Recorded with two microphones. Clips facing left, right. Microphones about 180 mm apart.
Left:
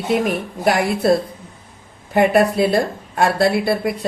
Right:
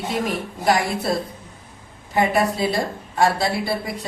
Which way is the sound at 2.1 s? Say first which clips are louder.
Left 5 dB; 65° left (ahead or behind).